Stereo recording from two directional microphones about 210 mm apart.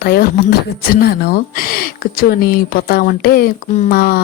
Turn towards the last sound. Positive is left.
turn(degrees=45)  # may be behind; listen again after turning